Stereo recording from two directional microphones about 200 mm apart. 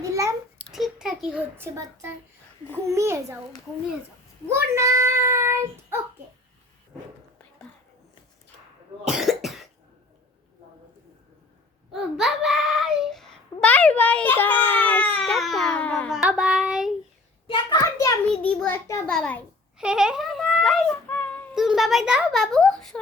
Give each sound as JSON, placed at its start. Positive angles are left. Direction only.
{"t": 0.0, "sound": "a sound", "side_deg": -15}
{"t": 0.6, "sound": "a sound", "side_deg": 0}
{"t": 2.8, "sound": "a child's voice", "side_deg": -15}
{"t": 4.4, "sound": "child singing", "side_deg": -15}
{"t": 9.0, "sound": "cough", "side_deg": 0}
{"t": 11.9, "sound": "child singing", "side_deg": 0}
{"t": 13.6, "sound": "a child's voice", "side_deg": 5}
{"t": 17.4, "sound": "a child's voice", "side_deg": 25}
{"t": 18.4, "sound": "a child's voice", "side_deg": 10}